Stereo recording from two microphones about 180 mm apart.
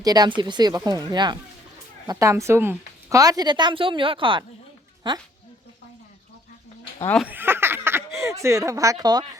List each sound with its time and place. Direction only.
0.0 s a woman's voice: 20° right (ahead or behind)
7.2 s speech: 10° right (ahead or behind)